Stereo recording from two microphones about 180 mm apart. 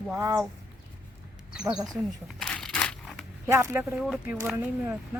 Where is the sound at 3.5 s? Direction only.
15° right (ahead or behind).